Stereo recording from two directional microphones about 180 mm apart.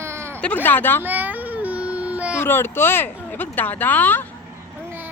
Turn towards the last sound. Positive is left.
turn(degrees=10)  # may be behind; listen again after turning